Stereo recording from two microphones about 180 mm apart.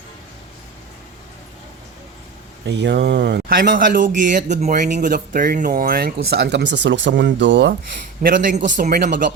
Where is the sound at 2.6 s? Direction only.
75° right (ahead or behind); by 7.7 s 90° right.